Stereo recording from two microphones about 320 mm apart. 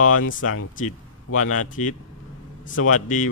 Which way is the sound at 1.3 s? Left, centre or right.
Left.